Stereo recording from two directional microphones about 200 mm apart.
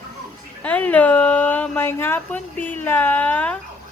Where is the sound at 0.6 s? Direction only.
5° left (ahead or behind).